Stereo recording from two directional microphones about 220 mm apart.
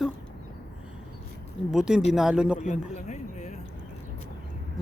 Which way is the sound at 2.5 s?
30° left (ahead or behind).